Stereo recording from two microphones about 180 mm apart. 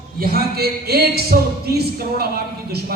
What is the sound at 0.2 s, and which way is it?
A man's voice, 55° right (ahead or behind).